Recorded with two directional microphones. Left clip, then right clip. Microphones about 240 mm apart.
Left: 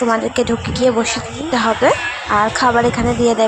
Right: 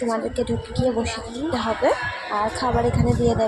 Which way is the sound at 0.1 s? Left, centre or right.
Centre.